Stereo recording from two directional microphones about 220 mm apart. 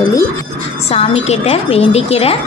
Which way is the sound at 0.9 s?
30° left (ahead or behind).